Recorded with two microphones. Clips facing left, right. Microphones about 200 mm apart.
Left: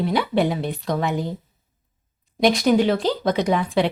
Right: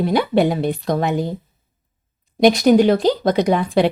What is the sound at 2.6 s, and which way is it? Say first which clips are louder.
Speech: right 5 dB; 45° right (ahead or behind).